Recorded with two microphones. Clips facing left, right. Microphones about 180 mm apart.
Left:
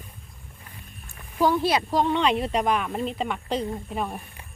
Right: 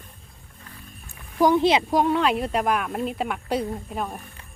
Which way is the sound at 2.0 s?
5° right (ahead or behind).